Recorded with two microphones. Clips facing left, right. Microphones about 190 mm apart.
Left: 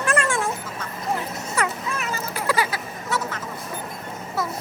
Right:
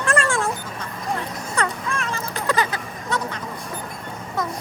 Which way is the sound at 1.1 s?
5° left (ahead or behind).